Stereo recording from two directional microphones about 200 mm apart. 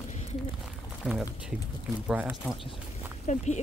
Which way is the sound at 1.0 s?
5° right (ahead or behind).